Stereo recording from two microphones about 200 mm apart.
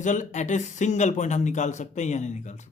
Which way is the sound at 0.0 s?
40° left (ahead or behind).